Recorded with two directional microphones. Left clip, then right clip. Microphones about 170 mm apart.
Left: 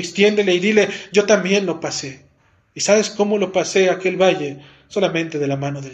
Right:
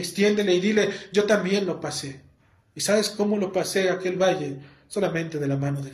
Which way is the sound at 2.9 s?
25° left (ahead or behind).